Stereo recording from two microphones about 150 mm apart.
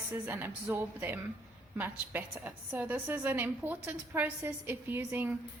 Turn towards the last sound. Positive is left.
turn(degrees=-15)  # may be behind; listen again after turning